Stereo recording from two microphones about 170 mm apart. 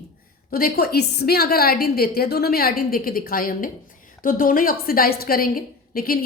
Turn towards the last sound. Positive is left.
turn(degrees=60)  # may be behind; listen again after turning